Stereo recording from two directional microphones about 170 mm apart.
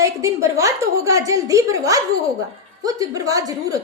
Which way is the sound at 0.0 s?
20° right (ahead or behind).